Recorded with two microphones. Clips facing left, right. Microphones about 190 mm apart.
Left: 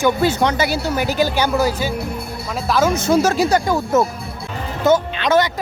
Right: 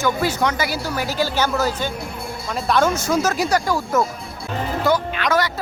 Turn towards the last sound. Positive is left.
turn(degrees=25)  # may be behind; listen again after turning